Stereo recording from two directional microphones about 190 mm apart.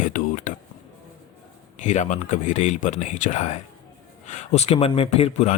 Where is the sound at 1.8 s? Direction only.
40° left (ahead or behind).